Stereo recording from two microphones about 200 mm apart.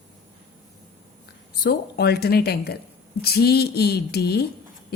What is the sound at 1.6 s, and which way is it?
A woman's voice, 50° left (ahead or behind).